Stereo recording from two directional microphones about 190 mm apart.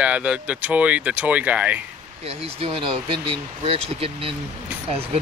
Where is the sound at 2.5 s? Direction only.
30° right (ahead or behind).